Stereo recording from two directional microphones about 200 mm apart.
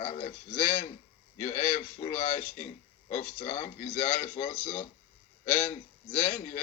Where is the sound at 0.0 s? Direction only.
35° left (ahead or behind).